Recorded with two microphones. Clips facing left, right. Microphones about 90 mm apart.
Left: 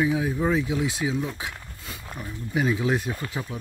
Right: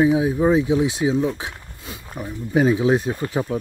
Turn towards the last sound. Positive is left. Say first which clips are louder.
# right 8 dB
turn(degrees=-30)  # may be behind; listen again after turning